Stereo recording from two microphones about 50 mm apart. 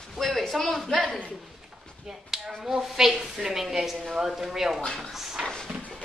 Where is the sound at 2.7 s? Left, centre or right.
Centre.